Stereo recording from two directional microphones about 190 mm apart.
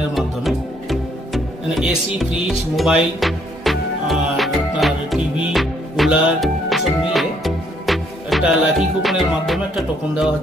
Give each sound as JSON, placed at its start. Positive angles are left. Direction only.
{"t": 0.1, "sound": "music", "side_deg": 0}